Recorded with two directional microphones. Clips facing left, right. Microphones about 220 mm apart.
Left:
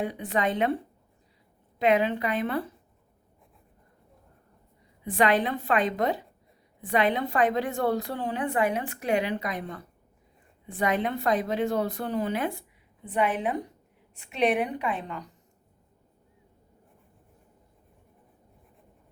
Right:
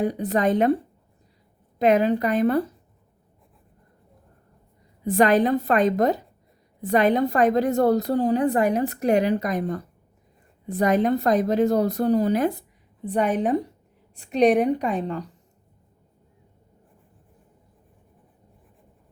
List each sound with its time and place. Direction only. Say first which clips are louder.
0.0 s a woman's voice: right 6 dB; 40° right (ahead or behind)
1.8 s a woman's voice: right 5 dB; 40° right (ahead or behind)
5.0 s a woman's voice: right 6 dB; 40° right (ahead or behind)